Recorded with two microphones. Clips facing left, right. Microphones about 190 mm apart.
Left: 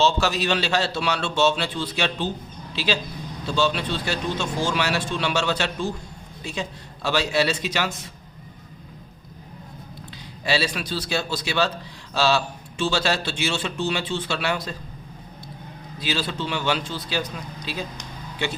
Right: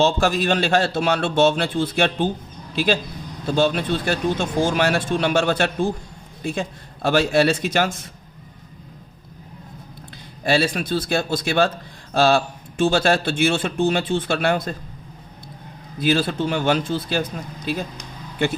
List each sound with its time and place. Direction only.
0.0 s a man's voice: 50° right (ahead or behind)
10.4 s a man's voice: 50° right (ahead or behind)
16.0 s a man's voice: 50° right (ahead or behind)